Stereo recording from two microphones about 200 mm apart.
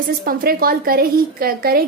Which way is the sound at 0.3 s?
50° right (ahead or behind).